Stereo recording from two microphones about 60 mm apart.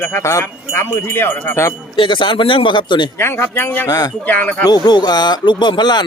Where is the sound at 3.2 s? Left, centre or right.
Left.